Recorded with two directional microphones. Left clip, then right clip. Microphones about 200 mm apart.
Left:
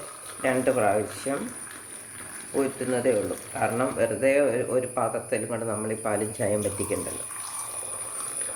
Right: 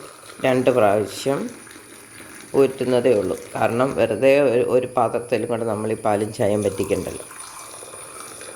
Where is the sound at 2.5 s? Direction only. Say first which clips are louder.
Right 9 dB; 50° right (ahead or behind).